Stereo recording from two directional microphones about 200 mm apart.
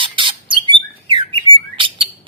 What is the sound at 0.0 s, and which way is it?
Bird, 25° right (ahead or behind).